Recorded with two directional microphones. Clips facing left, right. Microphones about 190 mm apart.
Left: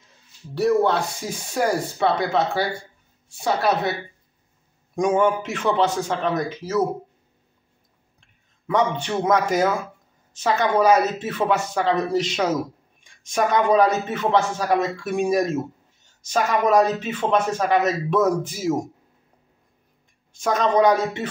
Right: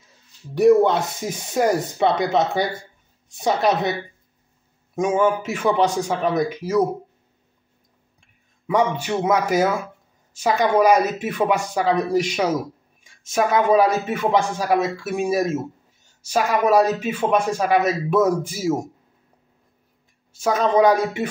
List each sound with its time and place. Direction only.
0.6 s speech: 15° right (ahead or behind)
4.9 s speech: 5° right (ahead or behind)
8.2 s speech: 10° right (ahead or behind)
20.3 s speech: 5° right (ahead or behind)